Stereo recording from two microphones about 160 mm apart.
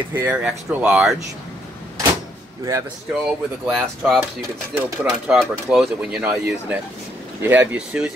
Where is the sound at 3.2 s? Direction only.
5° right (ahead or behind).